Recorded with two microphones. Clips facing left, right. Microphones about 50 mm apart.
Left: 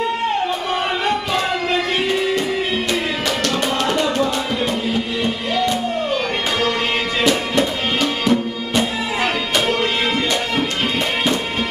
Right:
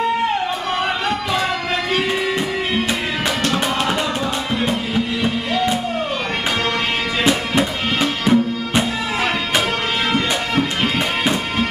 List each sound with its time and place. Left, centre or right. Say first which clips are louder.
7.2 s music: even; centre